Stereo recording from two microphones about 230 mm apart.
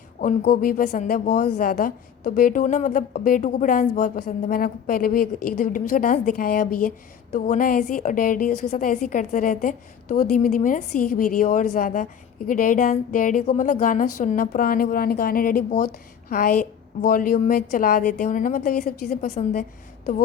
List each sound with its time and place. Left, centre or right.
0.2 s a woman's voice: left
17.0 s a woman's voice: left